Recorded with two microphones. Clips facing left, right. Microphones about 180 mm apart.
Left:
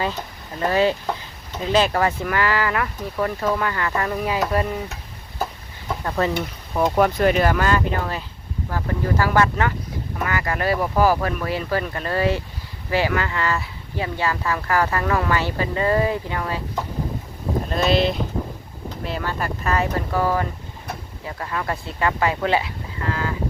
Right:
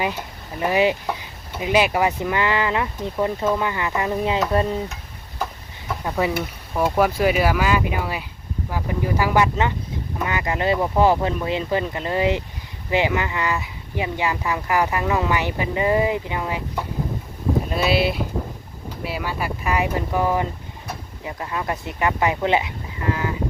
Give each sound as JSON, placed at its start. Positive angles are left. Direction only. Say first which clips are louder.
{"t": 0.0, "sound": "speech", "louder": "even", "side_deg": -15}
{"t": 5.9, "sound": "speech", "louder": "even", "side_deg": -10}
{"t": 17.7, "sound": "speech", "louder": "left 3 dB", "side_deg": -5}